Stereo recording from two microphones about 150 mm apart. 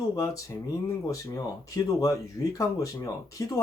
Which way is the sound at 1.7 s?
20° left (ahead or behind).